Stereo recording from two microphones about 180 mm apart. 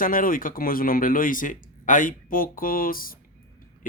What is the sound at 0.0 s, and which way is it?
Speech, 50° left (ahead or behind).